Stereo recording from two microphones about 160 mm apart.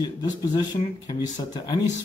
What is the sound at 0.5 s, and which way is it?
Speech, 25° left (ahead or behind).